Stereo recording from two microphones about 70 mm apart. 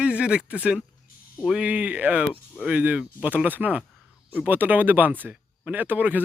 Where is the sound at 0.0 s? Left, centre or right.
Centre.